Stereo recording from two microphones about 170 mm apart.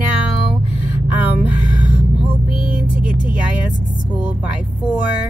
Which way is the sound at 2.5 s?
30° left (ahead or behind).